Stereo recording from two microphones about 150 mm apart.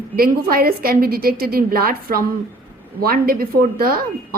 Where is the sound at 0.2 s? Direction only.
80° right.